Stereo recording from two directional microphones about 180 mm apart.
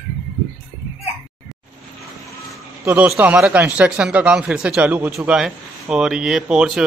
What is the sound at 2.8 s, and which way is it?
Speech, 5° right (ahead or behind).